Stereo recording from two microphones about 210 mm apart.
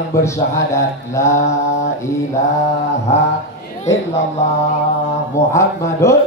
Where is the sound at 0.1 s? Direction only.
15° left (ahead or behind).